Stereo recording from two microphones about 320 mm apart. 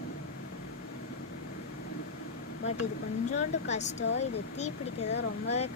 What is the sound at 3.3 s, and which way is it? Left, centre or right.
Speech, left.